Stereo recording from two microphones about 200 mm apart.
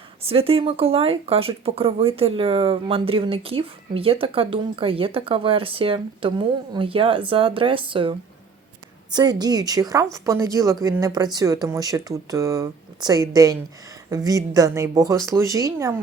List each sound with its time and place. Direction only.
0.2 s speech: 30° right (ahead or behind)
9.1 s speech: 20° right (ahead or behind)